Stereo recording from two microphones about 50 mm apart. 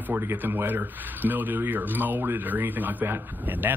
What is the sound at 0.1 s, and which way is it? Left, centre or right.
Speech, right.